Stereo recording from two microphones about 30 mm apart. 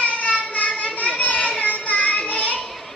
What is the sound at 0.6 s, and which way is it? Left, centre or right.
Children playing, left.